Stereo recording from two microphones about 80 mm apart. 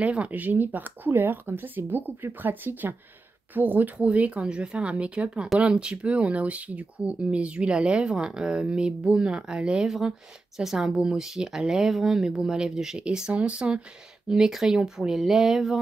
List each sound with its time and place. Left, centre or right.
0.0 s speech: centre